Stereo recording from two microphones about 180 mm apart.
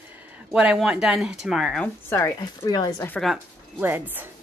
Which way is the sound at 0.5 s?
5° right (ahead or behind).